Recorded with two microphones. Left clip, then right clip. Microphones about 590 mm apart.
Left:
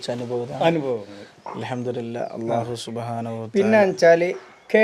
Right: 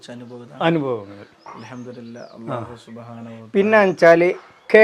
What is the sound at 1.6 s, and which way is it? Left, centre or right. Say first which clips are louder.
Speech: left 12 dB; left.